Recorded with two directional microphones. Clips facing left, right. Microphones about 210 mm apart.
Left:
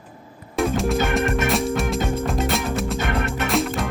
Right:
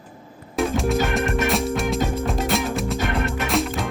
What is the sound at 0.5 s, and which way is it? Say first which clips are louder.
Music: even; centre (ahead or behind).